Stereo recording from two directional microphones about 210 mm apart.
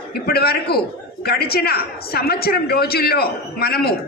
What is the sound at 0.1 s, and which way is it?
A woman's voice, 50° left (ahead or behind).